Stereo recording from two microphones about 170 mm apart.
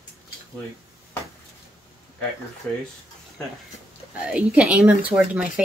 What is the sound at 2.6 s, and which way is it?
Speech, 5° left (ahead or behind).